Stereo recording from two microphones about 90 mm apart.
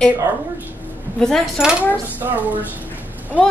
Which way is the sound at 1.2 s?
5° left (ahead or behind).